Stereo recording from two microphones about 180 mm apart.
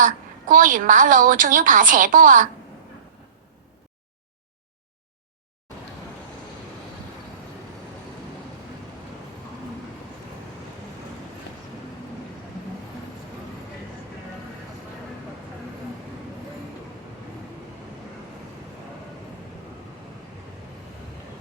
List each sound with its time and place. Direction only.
0.0 s a woman's voice: 45° right (ahead or behind)